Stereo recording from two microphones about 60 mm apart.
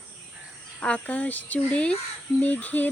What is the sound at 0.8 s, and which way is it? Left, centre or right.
Speech, left.